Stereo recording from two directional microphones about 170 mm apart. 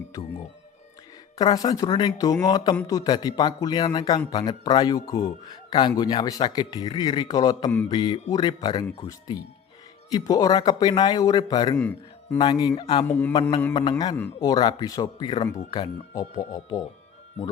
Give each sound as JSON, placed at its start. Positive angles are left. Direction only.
{"t": 1.4, "sound": "speech", "side_deg": 20}
{"t": 11.8, "sound": "speech", "side_deg": 10}
{"t": 12.4, "sound": "speech", "side_deg": 25}
{"t": 13.1, "sound": "mantra", "side_deg": 15}
{"t": 14.2, "sound": "speech", "side_deg": 20}